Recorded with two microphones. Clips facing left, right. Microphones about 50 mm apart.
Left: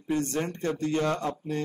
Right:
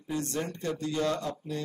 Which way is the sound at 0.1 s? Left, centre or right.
Left.